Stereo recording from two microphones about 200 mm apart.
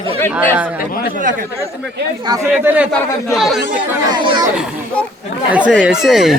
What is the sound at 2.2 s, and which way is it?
Speech, 20° right (ahead or behind).